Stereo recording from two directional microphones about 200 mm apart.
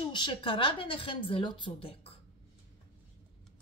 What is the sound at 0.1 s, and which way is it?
A woman's voice, 25° left (ahead or behind).